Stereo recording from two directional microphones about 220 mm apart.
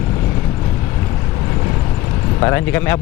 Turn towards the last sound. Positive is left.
turn(degrees=10)  # may be behind; listen again after turning